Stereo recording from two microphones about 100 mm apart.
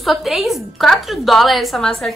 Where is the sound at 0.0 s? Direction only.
Centre (ahead or behind).